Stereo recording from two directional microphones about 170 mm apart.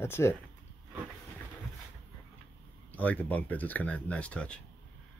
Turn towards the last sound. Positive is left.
turn(degrees=5)  # may be behind; listen again after turning